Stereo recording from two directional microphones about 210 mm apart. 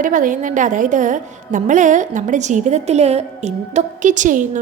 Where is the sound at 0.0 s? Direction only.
40° right (ahead or behind).